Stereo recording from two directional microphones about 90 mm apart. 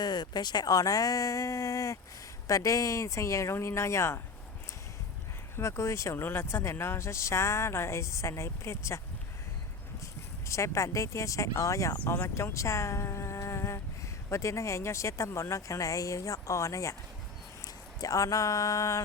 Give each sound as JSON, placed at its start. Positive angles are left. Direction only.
{"t": 0.0, "sound": "speech", "side_deg": 50}
{"t": 5.5, "sound": "speech", "side_deg": 30}
{"t": 10.0, "sound": "speech", "side_deg": 35}
{"t": 12.0, "sound": "speech", "side_deg": 20}
{"t": 12.3, "sound": "a sound", "side_deg": 30}
{"t": 14.3, "sound": "speech", "side_deg": 35}